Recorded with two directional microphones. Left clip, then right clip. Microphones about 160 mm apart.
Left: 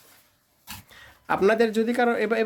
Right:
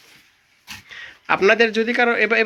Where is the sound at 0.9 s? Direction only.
10° left (ahead or behind).